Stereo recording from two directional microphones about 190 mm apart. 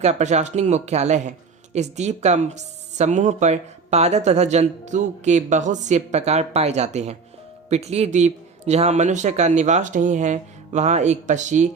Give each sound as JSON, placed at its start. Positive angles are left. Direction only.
{"t": 0.0, "sound": "speech", "side_deg": -35}